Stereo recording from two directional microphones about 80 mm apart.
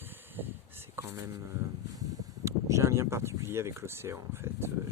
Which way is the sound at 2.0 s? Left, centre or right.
Right.